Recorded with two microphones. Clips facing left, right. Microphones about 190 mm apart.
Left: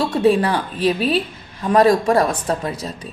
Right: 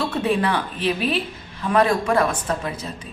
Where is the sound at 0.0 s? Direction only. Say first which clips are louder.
Left 5 dB; 35° left (ahead or behind).